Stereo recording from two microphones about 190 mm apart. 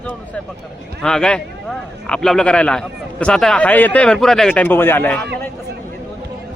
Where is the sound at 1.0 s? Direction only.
5° left (ahead or behind).